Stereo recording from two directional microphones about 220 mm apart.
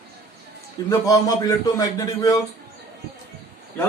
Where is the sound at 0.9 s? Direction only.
15° left (ahead or behind).